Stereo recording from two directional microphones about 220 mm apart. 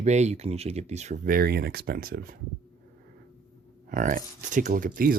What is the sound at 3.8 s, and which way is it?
Speech, 40° right (ahead or behind).